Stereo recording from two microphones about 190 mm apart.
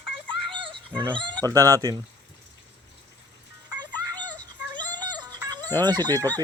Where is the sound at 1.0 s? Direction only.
25° right (ahead or behind).